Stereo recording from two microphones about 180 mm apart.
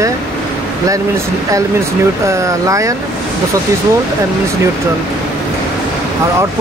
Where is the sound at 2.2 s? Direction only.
15° right (ahead or behind).